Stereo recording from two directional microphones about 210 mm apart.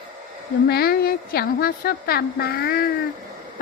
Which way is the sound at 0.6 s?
45° left (ahead or behind).